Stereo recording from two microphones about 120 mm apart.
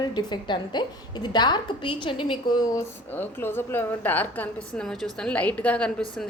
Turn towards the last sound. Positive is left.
turn(degrees=10)  # may be behind; listen again after turning